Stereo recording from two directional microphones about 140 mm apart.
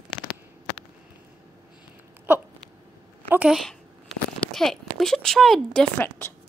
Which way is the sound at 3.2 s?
10° right (ahead or behind).